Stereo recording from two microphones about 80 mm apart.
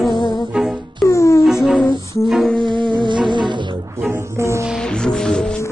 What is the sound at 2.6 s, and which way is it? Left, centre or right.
Music, right.